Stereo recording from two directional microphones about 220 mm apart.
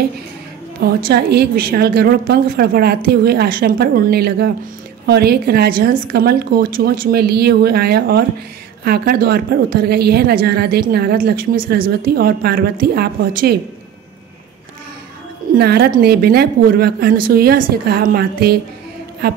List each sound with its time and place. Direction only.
0.8 s a woman's voice: 45° right (ahead or behind)
15.5 s a woman's voice: 45° right (ahead or behind)